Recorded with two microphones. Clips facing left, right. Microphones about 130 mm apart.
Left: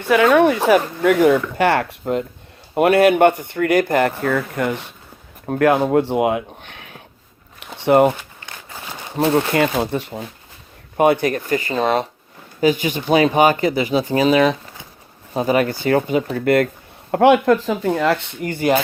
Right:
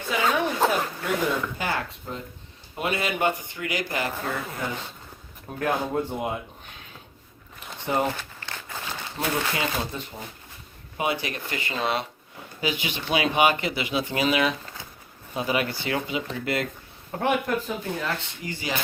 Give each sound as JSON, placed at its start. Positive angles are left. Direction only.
{"t": 0.0, "sound": "speech", "side_deg": 65}
{"t": 4.2, "sound": "speech", "side_deg": 65}
{"t": 7.6, "sound": "a sound", "side_deg": 70}
{"t": 8.2, "sound": "crumpling", "side_deg": 15}
{"t": 9.3, "sound": "speech", "side_deg": 60}
{"t": 10.9, "sound": "speech", "side_deg": 55}
{"t": 17.1, "sound": "speech", "side_deg": 80}